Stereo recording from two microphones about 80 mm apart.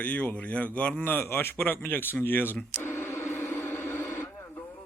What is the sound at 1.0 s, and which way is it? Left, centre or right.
Speech, left.